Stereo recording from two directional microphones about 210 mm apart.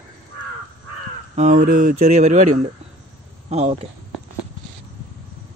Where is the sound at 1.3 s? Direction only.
35° right (ahead or behind).